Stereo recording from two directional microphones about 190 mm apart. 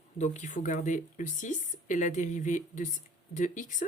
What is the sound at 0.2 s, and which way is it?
Speech, 40° left (ahead or behind).